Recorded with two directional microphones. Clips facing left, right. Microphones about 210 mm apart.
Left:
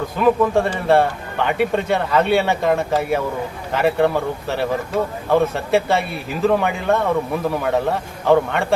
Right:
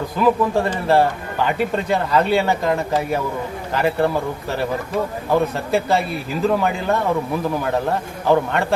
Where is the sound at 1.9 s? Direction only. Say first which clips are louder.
Right 2 dB; centre (ahead or behind).